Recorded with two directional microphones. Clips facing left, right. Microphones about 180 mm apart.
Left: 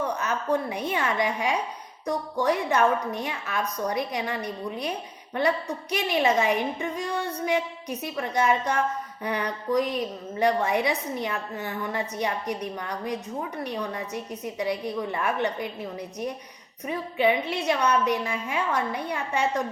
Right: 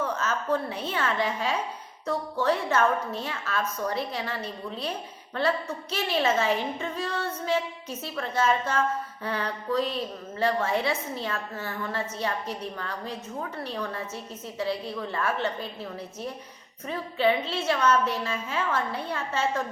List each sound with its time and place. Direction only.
0.0 s a woman's voice: 15° left (ahead or behind)